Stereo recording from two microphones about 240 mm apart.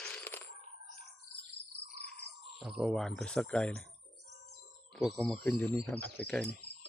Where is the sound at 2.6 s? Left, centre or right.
Centre.